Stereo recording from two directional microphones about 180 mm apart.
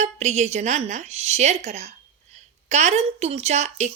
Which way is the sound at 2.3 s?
40° right (ahead or behind).